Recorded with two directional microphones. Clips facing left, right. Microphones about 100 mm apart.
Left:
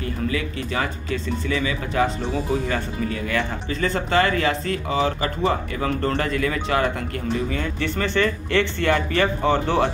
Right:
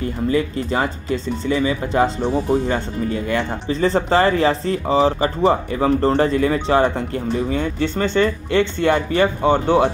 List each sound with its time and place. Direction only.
0.0 s speech: 30° right (ahead or behind)